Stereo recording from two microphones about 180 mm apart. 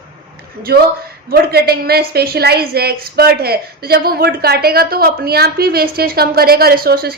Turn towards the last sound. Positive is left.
turn(degrees=-60)  # may be behind; listen again after turning